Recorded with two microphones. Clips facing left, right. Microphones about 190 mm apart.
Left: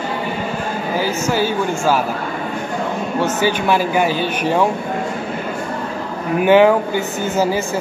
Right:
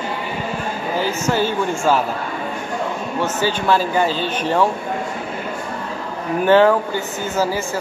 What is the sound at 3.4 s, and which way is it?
Speech, 15° left (ahead or behind).